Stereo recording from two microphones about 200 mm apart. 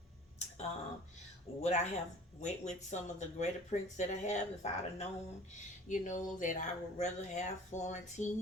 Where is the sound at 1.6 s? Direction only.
35° left (ahead or behind).